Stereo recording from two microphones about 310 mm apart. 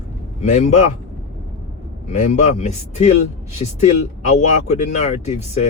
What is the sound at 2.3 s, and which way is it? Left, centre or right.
Speech, left.